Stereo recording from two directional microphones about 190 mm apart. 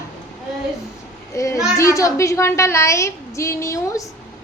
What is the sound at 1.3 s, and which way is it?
A child's voice, 15° left (ahead or behind).